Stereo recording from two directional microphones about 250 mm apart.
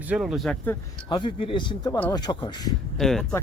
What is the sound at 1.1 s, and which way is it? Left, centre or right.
Speech, centre.